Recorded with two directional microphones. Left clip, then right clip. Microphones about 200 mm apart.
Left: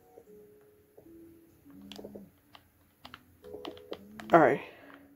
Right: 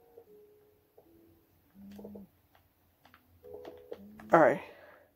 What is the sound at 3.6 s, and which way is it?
Music, 15° left (ahead or behind).